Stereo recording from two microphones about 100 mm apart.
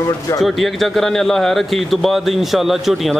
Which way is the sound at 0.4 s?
Centre (ahead or behind).